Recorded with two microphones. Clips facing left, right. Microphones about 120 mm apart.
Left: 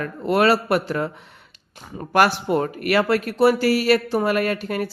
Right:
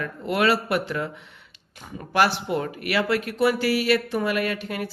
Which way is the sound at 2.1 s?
45° left (ahead or behind).